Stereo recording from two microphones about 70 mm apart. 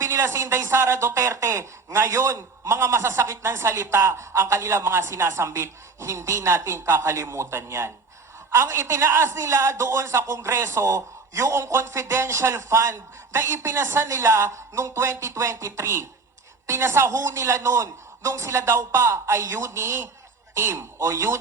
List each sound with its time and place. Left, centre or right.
0.0 s a woman's voice: right